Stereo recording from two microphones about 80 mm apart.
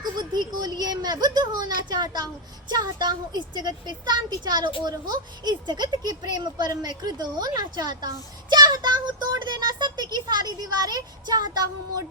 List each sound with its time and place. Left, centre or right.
0.0 s speech: right